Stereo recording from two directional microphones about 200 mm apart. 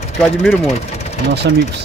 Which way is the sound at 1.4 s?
60° right (ahead or behind).